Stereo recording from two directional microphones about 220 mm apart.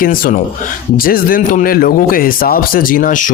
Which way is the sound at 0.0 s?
40° left (ahead or behind).